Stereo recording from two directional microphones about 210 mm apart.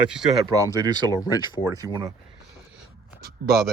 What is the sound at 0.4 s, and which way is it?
Speech, 20° right (ahead or behind).